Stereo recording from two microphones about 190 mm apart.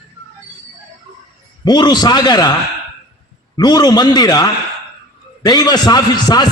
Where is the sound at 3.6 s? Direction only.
20° left (ahead or behind).